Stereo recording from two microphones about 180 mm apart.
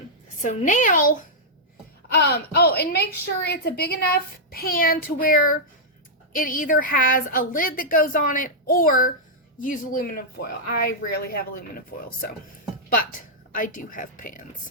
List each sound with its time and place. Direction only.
0.4 s a woman's voice: 45° left (ahead or behind)
2.1 s a woman's voice: 65° left (ahead or behind); by 14.4 s 45° left (ahead or behind)